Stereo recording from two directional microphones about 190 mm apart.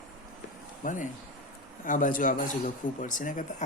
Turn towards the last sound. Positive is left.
turn(degrees=45)  # may be behind; listen again after turning